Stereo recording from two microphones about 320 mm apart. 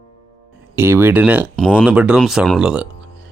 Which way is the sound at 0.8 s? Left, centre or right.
Centre.